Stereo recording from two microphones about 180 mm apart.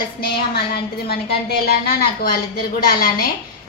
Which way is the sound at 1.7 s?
55° left (ahead or behind).